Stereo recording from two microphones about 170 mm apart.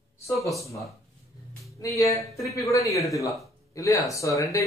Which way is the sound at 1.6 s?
20° left (ahead or behind).